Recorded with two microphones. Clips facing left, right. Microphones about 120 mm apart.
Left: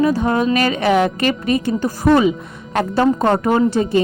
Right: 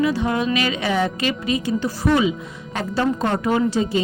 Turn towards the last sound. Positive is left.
turn(degrees=55)  # may be behind; listen again after turning